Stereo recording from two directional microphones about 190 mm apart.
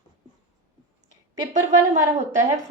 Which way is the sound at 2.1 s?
40° right (ahead or behind).